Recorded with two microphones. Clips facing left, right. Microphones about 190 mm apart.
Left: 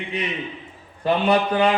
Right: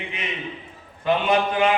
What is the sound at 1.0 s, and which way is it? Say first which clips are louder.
Mantra: left 1 dB; 35° left (ahead or behind).